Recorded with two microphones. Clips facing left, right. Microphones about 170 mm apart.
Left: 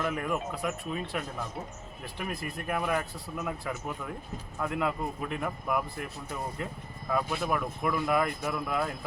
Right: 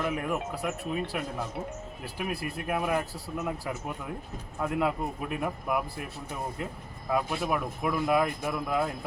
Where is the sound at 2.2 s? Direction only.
10° right (ahead or behind).